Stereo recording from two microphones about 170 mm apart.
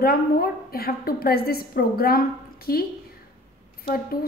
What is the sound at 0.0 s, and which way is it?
A woman's voice, 60° left (ahead or behind).